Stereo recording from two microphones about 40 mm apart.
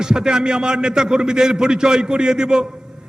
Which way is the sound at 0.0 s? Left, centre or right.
Centre.